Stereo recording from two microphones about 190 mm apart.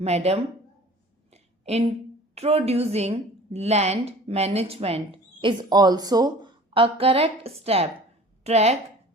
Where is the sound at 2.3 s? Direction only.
35° right (ahead or behind).